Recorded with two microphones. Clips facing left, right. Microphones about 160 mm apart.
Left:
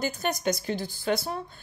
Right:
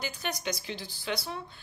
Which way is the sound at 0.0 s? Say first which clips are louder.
Left 7 dB; 45° left (ahead or behind).